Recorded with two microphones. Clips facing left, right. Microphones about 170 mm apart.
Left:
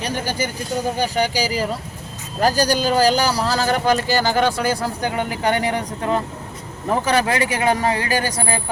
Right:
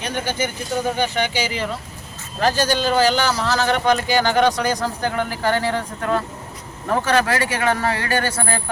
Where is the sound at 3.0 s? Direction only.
40° left (ahead or behind).